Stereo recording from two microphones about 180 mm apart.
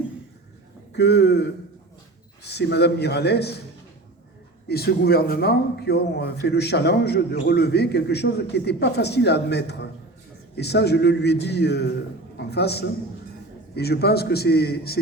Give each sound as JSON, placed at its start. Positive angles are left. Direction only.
{"t": 0.9, "sound": "a man's voice", "side_deg": 65}
{"t": 2.5, "sound": "a man's voice", "side_deg": 65}
{"t": 4.7, "sound": "a man's voice", "side_deg": 60}